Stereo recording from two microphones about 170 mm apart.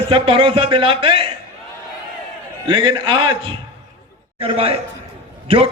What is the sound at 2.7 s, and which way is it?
A man's voice, 30° right (ahead or behind).